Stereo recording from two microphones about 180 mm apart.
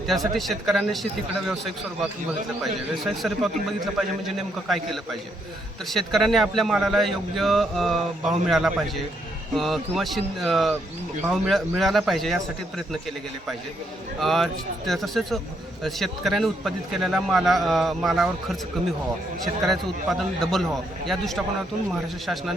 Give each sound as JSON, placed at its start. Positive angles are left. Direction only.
{"t": 0.1, "sound": "speech", "side_deg": 0}
{"t": 5.9, "sound": "speech", "side_deg": 0}
{"t": 14.2, "sound": "speech", "side_deg": 0}
{"t": 19.6, "sound": "speech", "side_deg": 0}